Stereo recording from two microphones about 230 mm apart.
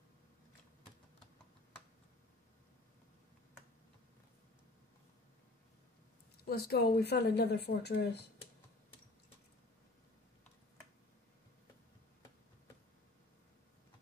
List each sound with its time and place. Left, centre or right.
6.5 s speech: left